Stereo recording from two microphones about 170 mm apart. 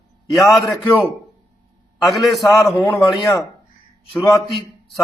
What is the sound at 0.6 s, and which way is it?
Speech, 15° left (ahead or behind).